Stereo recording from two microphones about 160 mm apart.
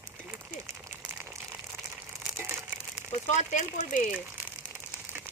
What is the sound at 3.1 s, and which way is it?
Speech, 50° left (ahead or behind).